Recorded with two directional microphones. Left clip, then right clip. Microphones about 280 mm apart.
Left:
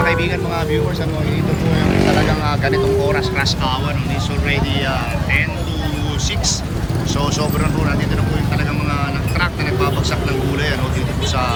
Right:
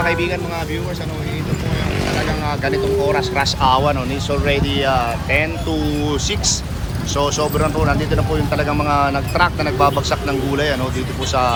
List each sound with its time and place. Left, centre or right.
0.0 s speech: centre
2.6 s speech: centre
7.2 s speech: centre